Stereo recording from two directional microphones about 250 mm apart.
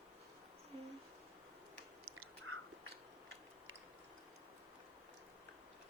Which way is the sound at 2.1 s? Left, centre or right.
Right.